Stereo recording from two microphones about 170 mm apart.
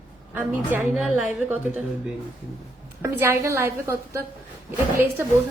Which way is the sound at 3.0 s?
15° right (ahead or behind).